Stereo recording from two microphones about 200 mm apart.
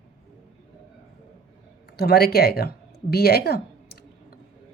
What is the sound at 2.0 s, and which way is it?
Speech, 50° left (ahead or behind).